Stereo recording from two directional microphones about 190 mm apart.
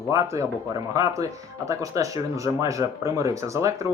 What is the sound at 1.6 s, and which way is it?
Speech, 15° right (ahead or behind).